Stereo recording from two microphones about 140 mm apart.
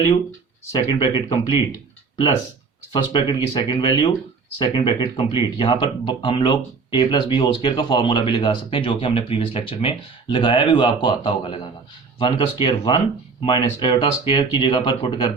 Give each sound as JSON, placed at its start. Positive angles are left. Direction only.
{"t": 0.9, "sound": "speech", "side_deg": 35}
{"t": 2.9, "sound": "speech", "side_deg": 35}